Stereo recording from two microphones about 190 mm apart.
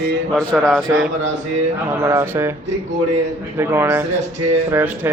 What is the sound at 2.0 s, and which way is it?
Speech, 15° right (ahead or behind).